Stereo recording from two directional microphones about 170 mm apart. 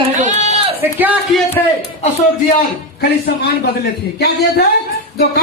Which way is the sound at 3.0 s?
70° left (ahead or behind).